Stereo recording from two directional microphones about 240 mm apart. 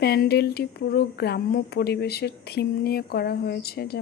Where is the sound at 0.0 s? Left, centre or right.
Left.